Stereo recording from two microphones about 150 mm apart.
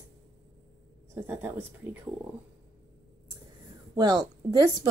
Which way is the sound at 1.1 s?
15° right (ahead or behind).